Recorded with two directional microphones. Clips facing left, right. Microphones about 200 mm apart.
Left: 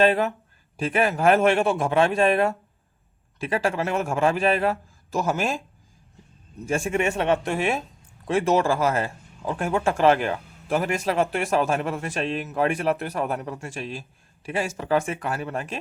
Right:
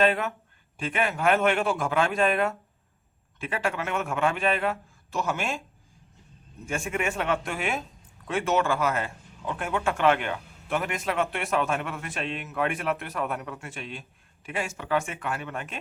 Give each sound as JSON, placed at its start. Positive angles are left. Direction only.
{"t": 0.0, "sound": "speech", "side_deg": 30}
{"t": 6.7, "sound": "a man's voice", "side_deg": 30}